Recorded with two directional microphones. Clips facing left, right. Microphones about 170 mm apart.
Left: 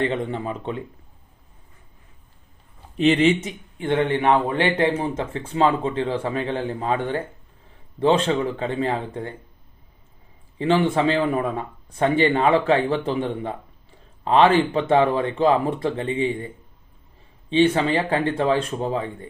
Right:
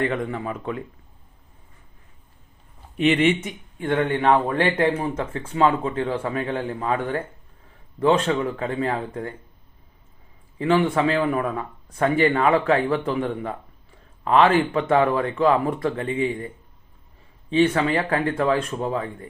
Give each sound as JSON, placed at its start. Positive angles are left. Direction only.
{"t": 0.0, "sound": "speech", "side_deg": 25}
{"t": 3.0, "sound": "speech", "side_deg": 30}
{"t": 10.6, "sound": "speech", "side_deg": 30}
{"t": 17.5, "sound": "speech", "side_deg": 25}